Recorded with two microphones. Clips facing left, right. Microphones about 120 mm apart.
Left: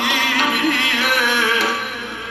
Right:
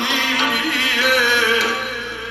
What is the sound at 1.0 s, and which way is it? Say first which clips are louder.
Music: right 5 dB; 45° left (ahead or behind).